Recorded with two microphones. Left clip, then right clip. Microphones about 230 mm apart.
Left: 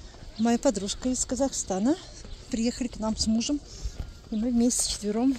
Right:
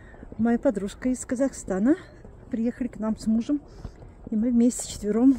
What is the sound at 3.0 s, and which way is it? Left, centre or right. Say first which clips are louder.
Speech: left 1 dB; centre.